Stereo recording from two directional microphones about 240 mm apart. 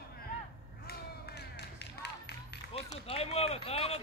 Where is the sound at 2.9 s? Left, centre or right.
Left.